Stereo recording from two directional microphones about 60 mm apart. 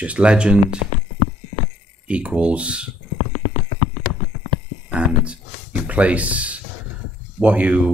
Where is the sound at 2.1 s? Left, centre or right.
Right.